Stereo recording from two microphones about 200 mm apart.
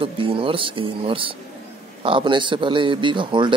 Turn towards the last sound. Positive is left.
turn(degrees=-25)  # may be behind; listen again after turning